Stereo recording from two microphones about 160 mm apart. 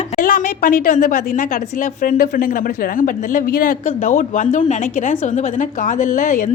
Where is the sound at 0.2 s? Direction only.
60° left (ahead or behind).